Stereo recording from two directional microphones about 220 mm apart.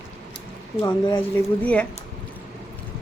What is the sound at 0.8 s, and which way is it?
Speech, 15° left (ahead or behind).